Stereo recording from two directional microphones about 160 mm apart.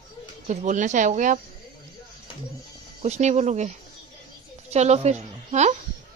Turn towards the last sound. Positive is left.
turn(degrees=-45)  # may be behind; listen again after turning